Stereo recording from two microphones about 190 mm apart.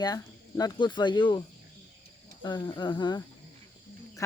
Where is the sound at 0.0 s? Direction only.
20° left (ahead or behind).